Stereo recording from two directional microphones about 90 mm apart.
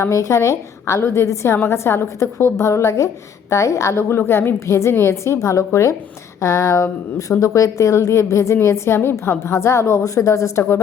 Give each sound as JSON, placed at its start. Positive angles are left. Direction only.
{"t": 0.0, "sound": "a woman's voice", "side_deg": 35}